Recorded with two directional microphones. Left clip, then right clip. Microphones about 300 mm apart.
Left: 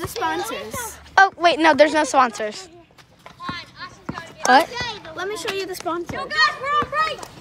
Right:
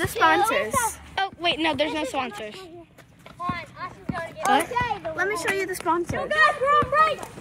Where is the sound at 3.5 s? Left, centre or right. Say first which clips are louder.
Even; centre.